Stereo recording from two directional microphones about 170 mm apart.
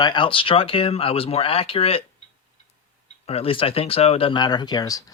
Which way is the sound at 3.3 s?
35° left (ahead or behind).